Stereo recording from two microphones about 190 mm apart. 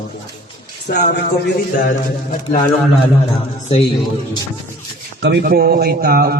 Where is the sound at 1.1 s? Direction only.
60° left (ahead or behind).